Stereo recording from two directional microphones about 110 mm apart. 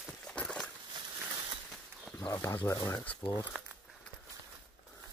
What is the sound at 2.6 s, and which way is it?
Speech, 30° left (ahead or behind).